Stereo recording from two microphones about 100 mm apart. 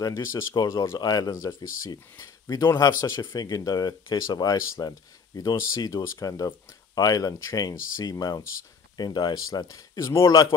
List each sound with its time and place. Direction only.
0.0 s speech: 30° left (ahead or behind)